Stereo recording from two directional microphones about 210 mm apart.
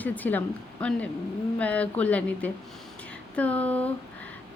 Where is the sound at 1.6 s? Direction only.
5° left (ahead or behind).